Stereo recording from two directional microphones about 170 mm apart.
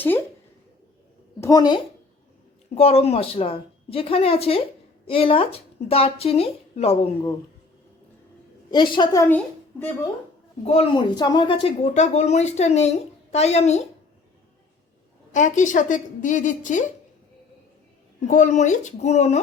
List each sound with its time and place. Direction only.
1.4 s a woman's voice: 20° left (ahead or behind)
2.7 s a woman's voice: 35° left (ahead or behind)
8.7 s a woman's voice: 25° left (ahead or behind)
10.6 s a woman's voice: 35° left (ahead or behind)
11.1 s a woman's voice: 25° left (ahead or behind); by 13.8 s 40° left (ahead or behind)
15.3 s a woman's voice: 45° left (ahead or behind)
18.3 s a woman's voice: 45° left (ahead or behind)